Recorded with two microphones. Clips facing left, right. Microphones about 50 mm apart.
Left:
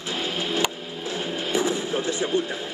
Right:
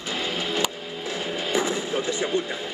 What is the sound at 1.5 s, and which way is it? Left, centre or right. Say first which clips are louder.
Music: left 1 dB; right.